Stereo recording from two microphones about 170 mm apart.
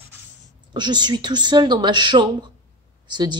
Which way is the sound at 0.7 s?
25° right (ahead or behind).